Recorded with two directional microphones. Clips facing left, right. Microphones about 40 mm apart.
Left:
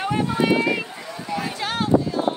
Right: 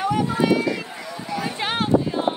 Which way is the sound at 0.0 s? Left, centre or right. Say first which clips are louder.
Right 1 dB; left.